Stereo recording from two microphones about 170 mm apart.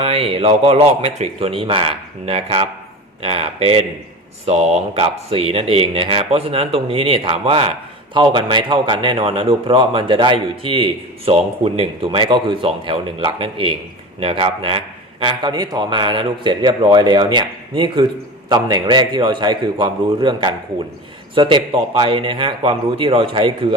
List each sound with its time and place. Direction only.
0.0 s a man's voice: 35° right (ahead or behind)